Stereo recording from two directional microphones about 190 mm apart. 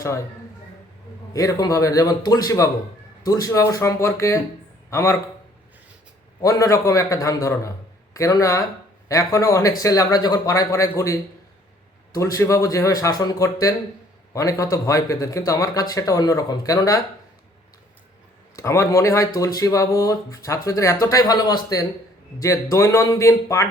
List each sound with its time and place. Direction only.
1.3 s a man's voice: 20° left (ahead or behind)
6.4 s speech: 15° left (ahead or behind)
18.5 s speech: 15° left (ahead or behind)